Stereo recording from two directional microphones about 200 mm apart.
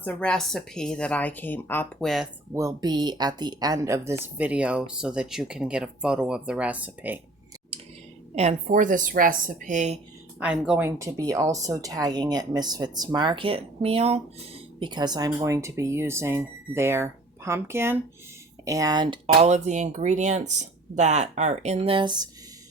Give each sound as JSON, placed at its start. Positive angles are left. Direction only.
{"t": 0.0, "sound": "speech", "side_deg": 5}
{"t": 2.5, "sound": "speech", "side_deg": -15}
{"t": 8.4, "sound": "speech", "side_deg": -35}
{"t": 10.4, "sound": "speech", "side_deg": -5}